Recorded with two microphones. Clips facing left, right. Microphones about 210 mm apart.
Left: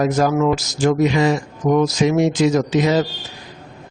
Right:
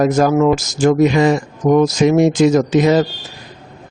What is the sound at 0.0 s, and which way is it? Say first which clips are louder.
Speech: right 4 dB; 50° right (ahead or behind).